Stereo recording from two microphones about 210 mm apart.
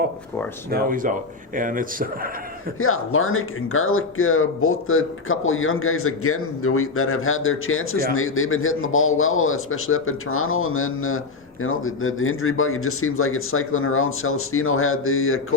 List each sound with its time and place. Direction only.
0.7 s speech: 40° right (ahead or behind)
2.7 s a man's voice: 80° left